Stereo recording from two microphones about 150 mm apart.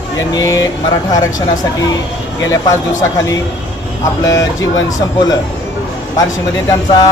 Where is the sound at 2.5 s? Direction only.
25° left (ahead or behind).